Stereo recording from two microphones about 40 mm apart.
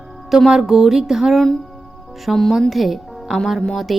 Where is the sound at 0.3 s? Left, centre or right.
Centre.